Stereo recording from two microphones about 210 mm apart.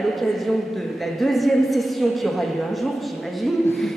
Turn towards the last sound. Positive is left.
turn(degrees=0)  # may be behind; listen again after turning